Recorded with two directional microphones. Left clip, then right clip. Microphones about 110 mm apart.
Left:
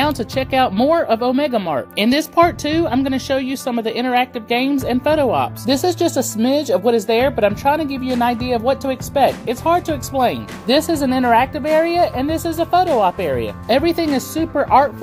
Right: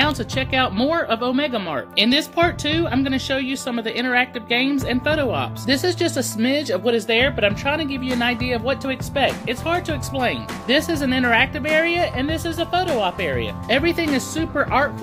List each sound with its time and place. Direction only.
0.0 s speech: 50° left (ahead or behind); by 14.9 s 30° left (ahead or behind)